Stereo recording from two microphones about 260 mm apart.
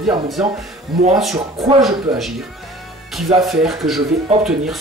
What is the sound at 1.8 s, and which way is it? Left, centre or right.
Speech, centre.